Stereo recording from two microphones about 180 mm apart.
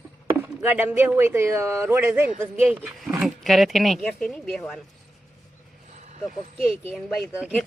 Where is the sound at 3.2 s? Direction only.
Centre (ahead or behind).